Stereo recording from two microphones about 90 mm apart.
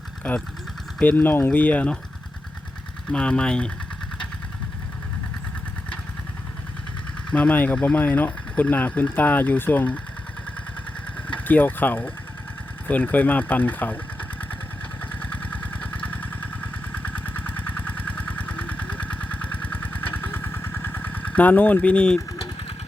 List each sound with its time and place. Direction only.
0.2 s speech: 10° left (ahead or behind)
3.1 s speech: 10° left (ahead or behind)
7.3 s speech: 15° left (ahead or behind)
11.3 s speech: 20° left (ahead or behind)
15.2 s vehicle: 20° left (ahead or behind)